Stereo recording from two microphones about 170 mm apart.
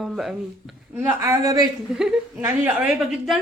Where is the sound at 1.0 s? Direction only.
15° right (ahead or behind).